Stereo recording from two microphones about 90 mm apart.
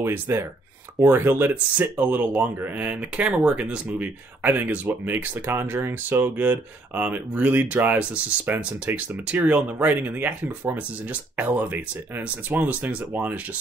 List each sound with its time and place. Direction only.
0.3 s speech: 30° right (ahead or behind)